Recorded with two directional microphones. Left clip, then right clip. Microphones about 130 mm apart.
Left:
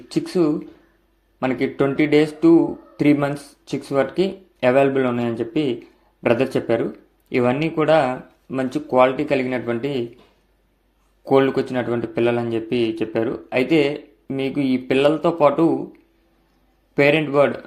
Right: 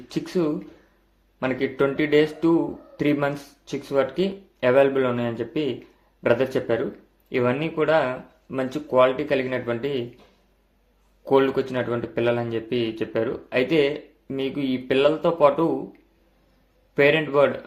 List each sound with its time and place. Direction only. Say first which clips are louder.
0.1 s speech: left 5 dB; 25° left (ahead or behind)
11.3 s speech: left 3 dB; 25° left (ahead or behind)
16.9 s speech: left 2 dB; 25° left (ahead or behind)